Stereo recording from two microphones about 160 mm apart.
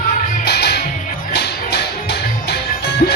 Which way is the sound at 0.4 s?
90° left.